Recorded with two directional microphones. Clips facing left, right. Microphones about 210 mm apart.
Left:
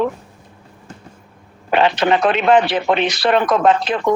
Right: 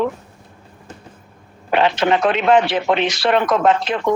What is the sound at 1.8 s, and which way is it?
Speech, 35° left (ahead or behind).